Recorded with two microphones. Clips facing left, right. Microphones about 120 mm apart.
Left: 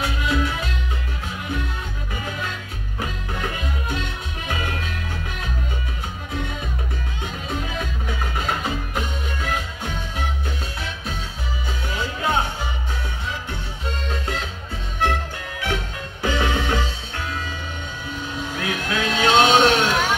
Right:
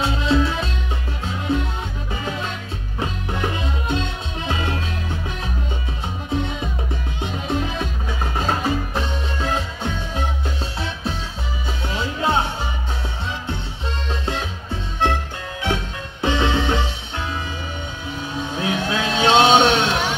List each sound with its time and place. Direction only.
0.0 s music: 25° right (ahead or behind)
6.3 s music: 25° right (ahead or behind)
11.9 s music: 25° right (ahead or behind)
13.5 s music: 25° right (ahead or behind)
15.6 s music: 25° right (ahead or behind)
18.6 s vehicle: 25° right (ahead or behind)